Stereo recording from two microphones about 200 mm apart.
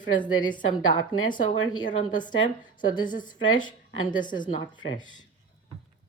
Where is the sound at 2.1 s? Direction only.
20° left (ahead or behind).